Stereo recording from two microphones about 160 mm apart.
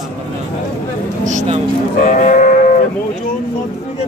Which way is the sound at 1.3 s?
50° right (ahead or behind).